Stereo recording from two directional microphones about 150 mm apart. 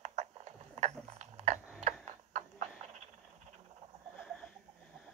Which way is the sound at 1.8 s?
50° right (ahead or behind).